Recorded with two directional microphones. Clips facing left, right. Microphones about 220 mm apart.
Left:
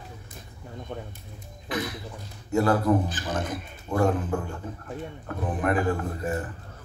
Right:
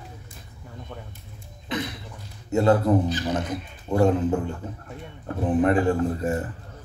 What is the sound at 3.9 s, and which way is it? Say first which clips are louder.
Speech: right 4 dB; 20° right (ahead or behind).